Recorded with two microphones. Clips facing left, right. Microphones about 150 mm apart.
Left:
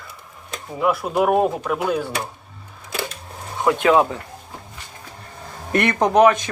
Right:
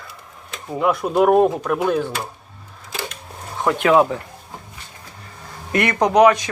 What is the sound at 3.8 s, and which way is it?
Speech, 20° left (ahead or behind).